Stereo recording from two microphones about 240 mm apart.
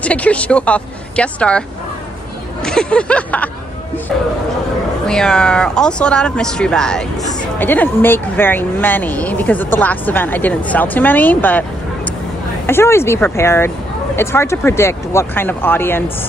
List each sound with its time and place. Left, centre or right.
0.0 s speech: centre
2.6 s speech: centre
5.0 s speech: centre
12.6 s speech: centre